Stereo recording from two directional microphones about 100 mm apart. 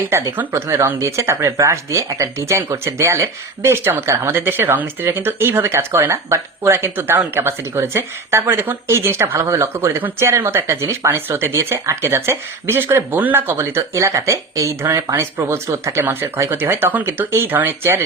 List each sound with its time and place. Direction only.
0.0 s speech: 25° right (ahead or behind)